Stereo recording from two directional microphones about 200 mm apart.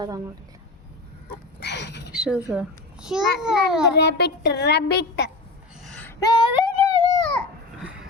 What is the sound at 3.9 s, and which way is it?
Speech, 55° left (ahead or behind).